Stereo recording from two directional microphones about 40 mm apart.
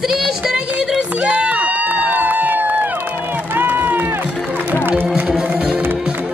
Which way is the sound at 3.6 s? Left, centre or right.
Right.